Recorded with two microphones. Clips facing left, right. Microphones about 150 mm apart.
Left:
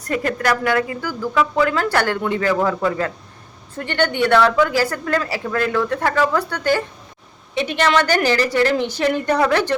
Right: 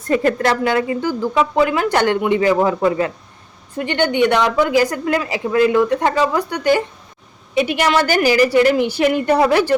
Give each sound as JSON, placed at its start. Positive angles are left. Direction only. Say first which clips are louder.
{"t": 0.0, "sound": "speech", "louder": "right 5 dB", "side_deg": -25}